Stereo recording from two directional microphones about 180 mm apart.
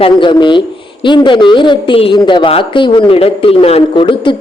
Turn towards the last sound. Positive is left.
turn(degrees=30)  # may be behind; listen again after turning